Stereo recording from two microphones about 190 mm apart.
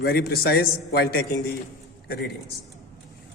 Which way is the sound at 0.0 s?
55° left (ahead or behind).